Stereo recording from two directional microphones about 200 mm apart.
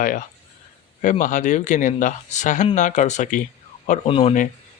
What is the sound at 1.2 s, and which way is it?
Speech, 40° left (ahead or behind).